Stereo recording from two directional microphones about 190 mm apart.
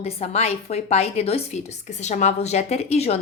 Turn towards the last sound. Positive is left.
turn(degrees=35)  # may be behind; listen again after turning